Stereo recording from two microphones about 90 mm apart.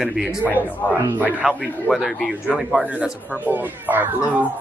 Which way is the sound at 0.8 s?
25° left (ahead or behind).